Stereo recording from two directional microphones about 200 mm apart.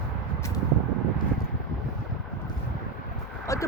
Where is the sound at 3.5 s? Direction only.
15° left (ahead or behind).